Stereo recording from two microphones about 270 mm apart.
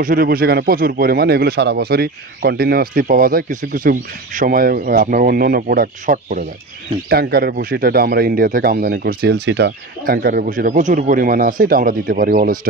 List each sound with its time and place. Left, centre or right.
0.0 s a man's voice: right